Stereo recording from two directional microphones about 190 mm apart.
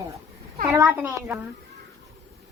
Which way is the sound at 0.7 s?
15° right (ahead or behind).